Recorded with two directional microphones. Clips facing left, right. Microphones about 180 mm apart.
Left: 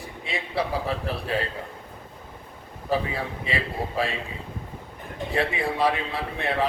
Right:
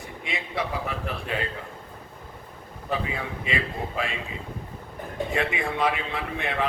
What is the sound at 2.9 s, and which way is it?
A man's voice, 35° left (ahead or behind).